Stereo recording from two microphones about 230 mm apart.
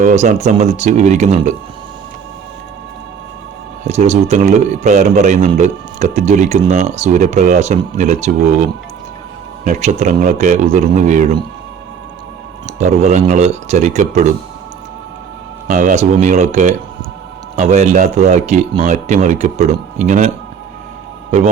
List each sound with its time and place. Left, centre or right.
0.0 s a man's voice: right
3.8 s a man's voice: right
9.6 s a man's voice: right
12.8 s a man's voice: right
15.6 s a man's voice: right